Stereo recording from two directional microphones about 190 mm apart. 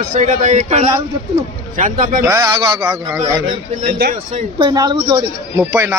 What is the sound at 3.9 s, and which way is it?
Speech, 50° right (ahead or behind).